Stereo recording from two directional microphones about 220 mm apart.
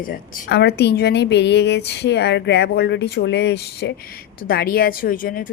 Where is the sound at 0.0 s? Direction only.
40° left (ahead or behind).